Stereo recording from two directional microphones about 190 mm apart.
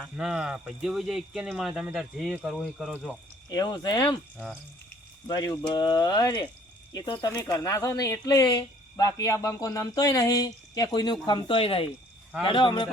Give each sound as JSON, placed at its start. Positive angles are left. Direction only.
{"t": 0.0, "sound": "speech", "side_deg": 0}
{"t": 3.5, "sound": "speech", "side_deg": 20}
{"t": 5.6, "sound": "speech", "side_deg": 20}